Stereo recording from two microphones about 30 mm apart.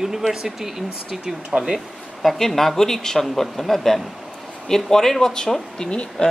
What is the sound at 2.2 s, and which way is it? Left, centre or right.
Speech, centre.